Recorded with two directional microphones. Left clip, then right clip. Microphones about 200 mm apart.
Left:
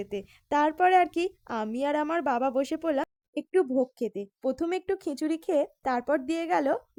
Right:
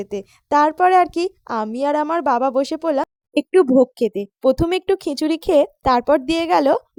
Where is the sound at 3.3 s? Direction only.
40° right (ahead or behind).